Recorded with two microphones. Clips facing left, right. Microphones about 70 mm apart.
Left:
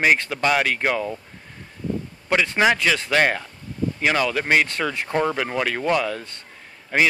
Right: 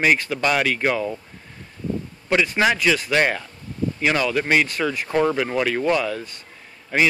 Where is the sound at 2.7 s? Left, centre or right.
Left.